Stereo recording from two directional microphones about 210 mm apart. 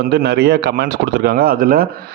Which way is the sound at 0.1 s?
55° right (ahead or behind).